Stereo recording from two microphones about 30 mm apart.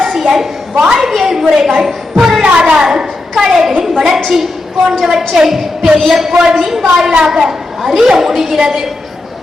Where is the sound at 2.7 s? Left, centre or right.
Right.